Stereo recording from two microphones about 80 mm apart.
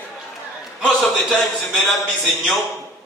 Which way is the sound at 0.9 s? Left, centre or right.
Centre.